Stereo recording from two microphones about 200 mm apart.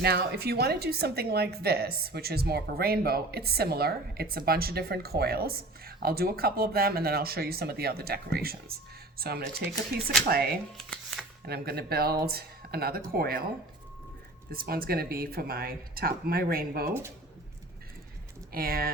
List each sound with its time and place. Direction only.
0.0 s a woman's voice: 50° right (ahead or behind)
14.5 s a woman's voice: 45° right (ahead or behind)
18.5 s a woman's voice: 50° right (ahead or behind)